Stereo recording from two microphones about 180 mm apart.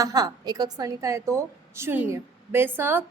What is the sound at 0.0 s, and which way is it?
A woman's voice, 20° right (ahead or behind).